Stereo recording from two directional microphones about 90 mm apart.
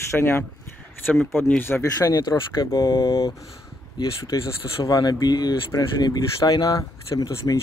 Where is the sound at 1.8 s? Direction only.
40° left (ahead or behind).